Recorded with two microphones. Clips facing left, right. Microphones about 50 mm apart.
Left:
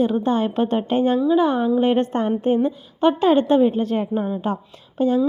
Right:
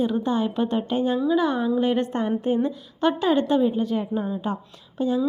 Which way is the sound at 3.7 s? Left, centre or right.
Left.